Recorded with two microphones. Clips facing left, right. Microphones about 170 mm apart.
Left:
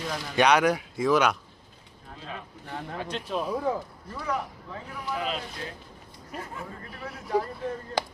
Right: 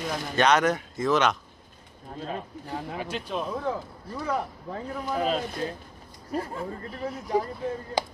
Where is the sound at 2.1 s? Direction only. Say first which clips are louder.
Right 6 dB; 45° right (ahead or behind).